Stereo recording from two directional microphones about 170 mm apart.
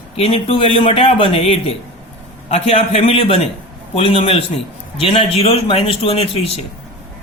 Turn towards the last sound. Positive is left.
turn(degrees=35)  # may be behind; listen again after turning